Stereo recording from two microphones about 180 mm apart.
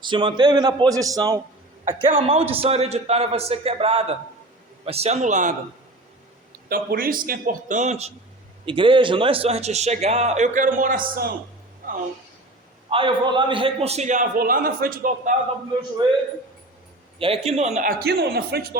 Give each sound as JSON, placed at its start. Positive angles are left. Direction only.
{"t": 0.0, "sound": "a man's voice", "side_deg": -25}
{"t": 6.7, "sound": "a man's voice", "side_deg": -55}
{"t": 12.9, "sound": "a man's voice", "side_deg": -30}
{"t": 17.2, "sound": "a man's voice", "side_deg": -30}
{"t": 18.0, "sound": "speech", "side_deg": -60}